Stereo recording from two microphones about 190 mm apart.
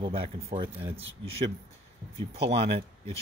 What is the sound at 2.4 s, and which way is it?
Speech, 30° right (ahead or behind).